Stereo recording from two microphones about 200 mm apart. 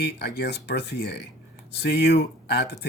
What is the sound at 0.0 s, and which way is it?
Speech, 55° left (ahead or behind).